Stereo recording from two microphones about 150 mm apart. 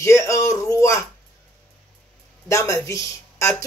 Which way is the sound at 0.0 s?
20° left (ahead or behind).